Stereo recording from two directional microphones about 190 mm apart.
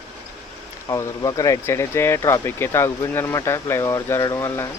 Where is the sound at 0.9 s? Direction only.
20° left (ahead or behind).